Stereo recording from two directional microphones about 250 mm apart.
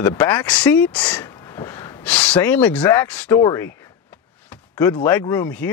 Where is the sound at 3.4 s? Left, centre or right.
Centre.